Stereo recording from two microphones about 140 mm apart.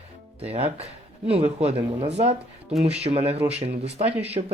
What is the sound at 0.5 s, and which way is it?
Speech, 45° right (ahead or behind).